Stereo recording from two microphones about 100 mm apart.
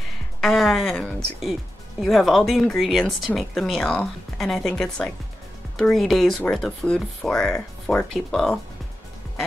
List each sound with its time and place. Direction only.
0.4 s music: centre (ahead or behind)
2.0 s a woman's voice: centre (ahead or behind)